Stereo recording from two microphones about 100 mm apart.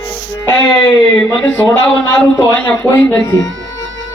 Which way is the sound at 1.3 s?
15° left (ahead or behind).